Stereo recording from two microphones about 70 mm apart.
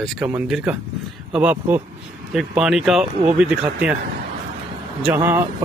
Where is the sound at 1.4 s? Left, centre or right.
Right.